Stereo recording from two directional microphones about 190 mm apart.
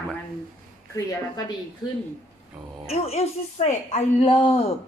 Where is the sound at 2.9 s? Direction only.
35° left (ahead or behind).